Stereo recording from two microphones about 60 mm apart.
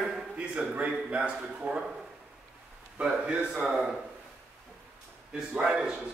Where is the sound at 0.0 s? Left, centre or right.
Centre.